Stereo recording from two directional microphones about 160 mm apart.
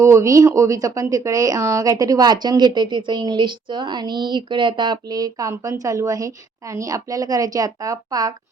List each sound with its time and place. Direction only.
0.0 s speech: 20° right (ahead or behind)